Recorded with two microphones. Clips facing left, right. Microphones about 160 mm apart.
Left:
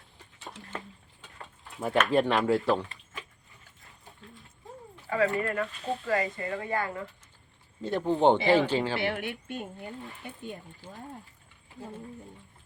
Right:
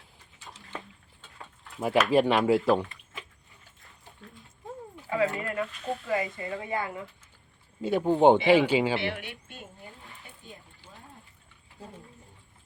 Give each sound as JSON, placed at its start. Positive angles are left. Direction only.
{"t": 1.8, "sound": "speech", "side_deg": -5}
{"t": 5.0, "sound": "speech", "side_deg": -15}
{"t": 9.0, "sound": "speech", "side_deg": 45}
{"t": 10.2, "sound": "speech", "side_deg": 65}